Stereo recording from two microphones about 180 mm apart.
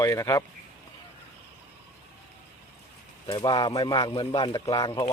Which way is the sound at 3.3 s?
25° left (ahead or behind).